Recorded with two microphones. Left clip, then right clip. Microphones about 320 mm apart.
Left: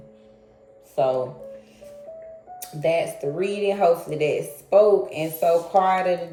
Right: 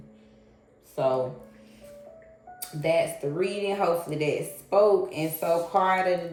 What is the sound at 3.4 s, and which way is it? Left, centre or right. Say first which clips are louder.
Speech: left 5 dB; centre.